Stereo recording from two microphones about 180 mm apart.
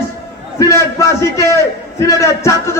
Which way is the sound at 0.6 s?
15° left (ahead or behind).